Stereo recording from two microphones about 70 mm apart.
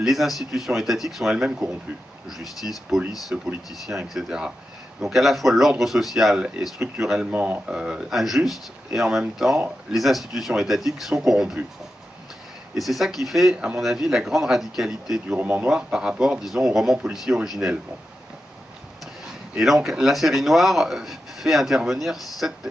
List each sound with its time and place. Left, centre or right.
0.0 s speech: centre
3.3 s speech: right
3.7 s speech: centre
7.2 s speech: right
7.7 s speech: centre
12.7 s speech: centre
15.2 s speech: right
15.7 s speech: centre
19.6 s speech: centre